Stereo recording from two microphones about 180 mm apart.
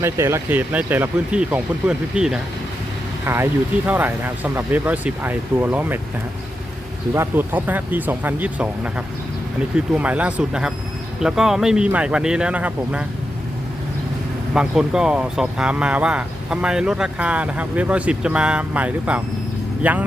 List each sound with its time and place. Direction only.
0.0 s speech: 15° right (ahead or behind)
7.1 s speech: 15° right (ahead or behind)
14.5 s speech: 5° right (ahead or behind)